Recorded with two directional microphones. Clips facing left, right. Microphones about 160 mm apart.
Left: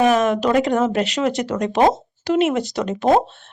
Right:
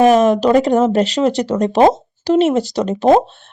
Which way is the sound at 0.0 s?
40° right (ahead or behind).